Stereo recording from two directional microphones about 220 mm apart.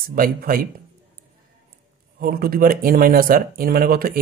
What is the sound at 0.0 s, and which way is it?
Speech, 40° right (ahead or behind).